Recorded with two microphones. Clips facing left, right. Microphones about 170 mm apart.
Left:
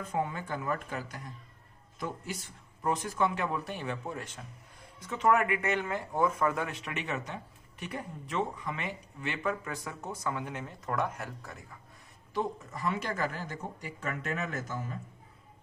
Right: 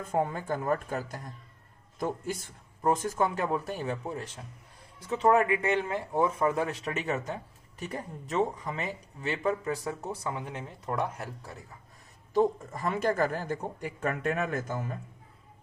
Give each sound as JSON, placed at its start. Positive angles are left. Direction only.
{"t": 0.0, "sound": "speech", "side_deg": -45}
{"t": 12.3, "sound": "speech", "side_deg": -45}